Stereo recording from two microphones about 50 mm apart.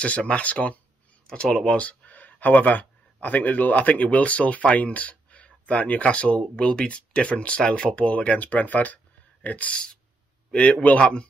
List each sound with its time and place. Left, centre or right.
0.0 s speech: left
1.9 s speech: left